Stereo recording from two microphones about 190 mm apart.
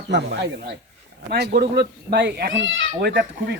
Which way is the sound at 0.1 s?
60° right (ahead or behind).